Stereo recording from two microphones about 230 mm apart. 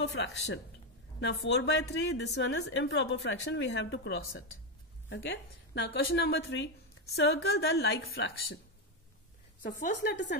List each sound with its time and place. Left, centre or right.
0.0 s a woman's voice: left
10.0 s a woman's voice: left